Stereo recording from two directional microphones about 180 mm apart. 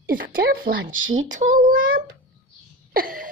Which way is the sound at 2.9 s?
50° right (ahead or behind).